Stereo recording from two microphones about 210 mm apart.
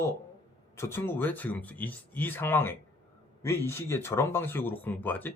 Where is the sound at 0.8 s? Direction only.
10° left (ahead or behind).